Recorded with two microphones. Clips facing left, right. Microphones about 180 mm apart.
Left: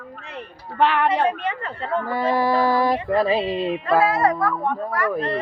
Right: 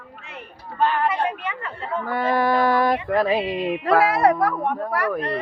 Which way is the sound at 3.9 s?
90° right.